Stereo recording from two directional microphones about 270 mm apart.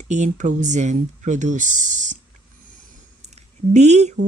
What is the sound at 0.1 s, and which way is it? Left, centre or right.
Speech, right.